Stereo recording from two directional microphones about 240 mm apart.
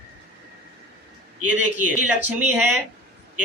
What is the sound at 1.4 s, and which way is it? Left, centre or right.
A man's voice, centre.